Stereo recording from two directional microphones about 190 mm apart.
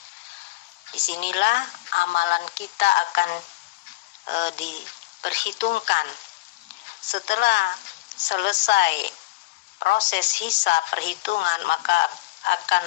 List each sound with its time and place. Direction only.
0.9 s a woman's voice: 70° left (ahead or behind)
7.1 s a woman's voice: 70° left (ahead or behind)